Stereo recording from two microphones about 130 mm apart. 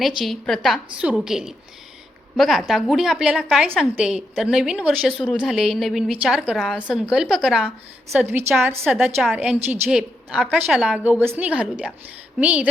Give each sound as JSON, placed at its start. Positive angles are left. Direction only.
{"t": 0.2, "sound": "a woman's voice", "side_deg": 0}
{"t": 8.3, "sound": "a woman's voice", "side_deg": -15}